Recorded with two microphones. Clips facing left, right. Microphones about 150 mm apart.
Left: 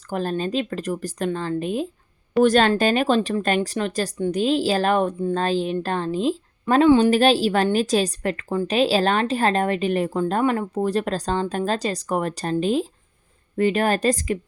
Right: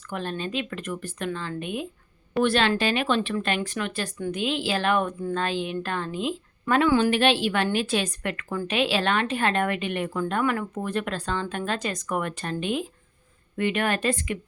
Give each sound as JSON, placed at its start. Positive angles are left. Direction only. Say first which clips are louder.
{"t": 0.0, "sound": "a woman's voice", "louder": "left 6 dB", "side_deg": 35}